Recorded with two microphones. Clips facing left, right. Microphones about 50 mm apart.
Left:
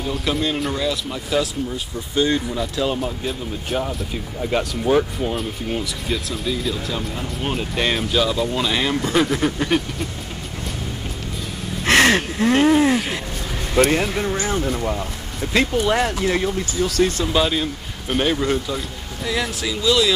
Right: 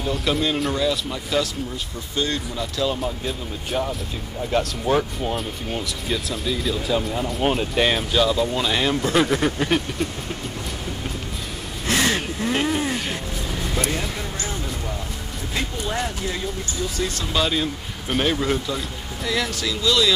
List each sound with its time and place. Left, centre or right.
0.0 s speech: centre
2.1 s speech: centre
3.0 s speech: centre
4.5 s speech: centre
4.9 s speech: centre
11.8 s a sound: left
12.4 s speech: left
13.7 s speech: left
15.5 s speech: left
17.2 s speech: centre